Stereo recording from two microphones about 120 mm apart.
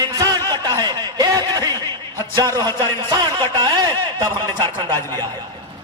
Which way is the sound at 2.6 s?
20° left (ahead or behind).